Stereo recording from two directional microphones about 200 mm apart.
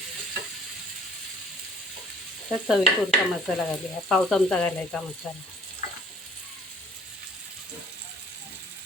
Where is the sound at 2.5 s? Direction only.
Centre (ahead or behind).